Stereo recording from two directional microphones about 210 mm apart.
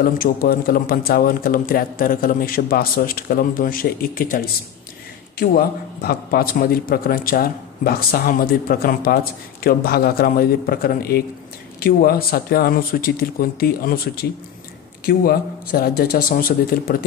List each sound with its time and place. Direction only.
0.0 s a man's voice: 45° left (ahead or behind)
5.4 s a man's voice: 45° left (ahead or behind)